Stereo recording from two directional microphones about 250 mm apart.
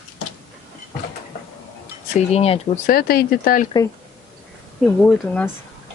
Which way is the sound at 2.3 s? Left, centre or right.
Left.